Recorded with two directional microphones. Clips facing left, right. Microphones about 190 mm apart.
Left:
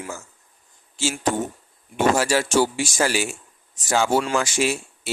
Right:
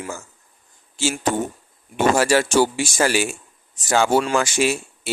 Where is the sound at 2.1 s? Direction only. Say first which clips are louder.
Right 3 dB; 60° right (ahead or behind).